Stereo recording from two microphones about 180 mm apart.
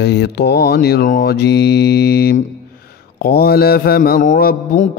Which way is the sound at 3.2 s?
60° left (ahead or behind).